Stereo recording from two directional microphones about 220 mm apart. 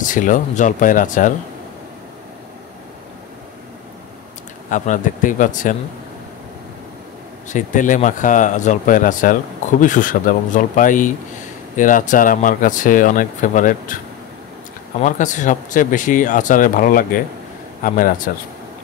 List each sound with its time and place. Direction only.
0.1 s speech: 35° left (ahead or behind)
4.6 s speech: 35° left (ahead or behind)
7.4 s speech: 35° left (ahead or behind)
15.0 s speech: 35° left (ahead or behind)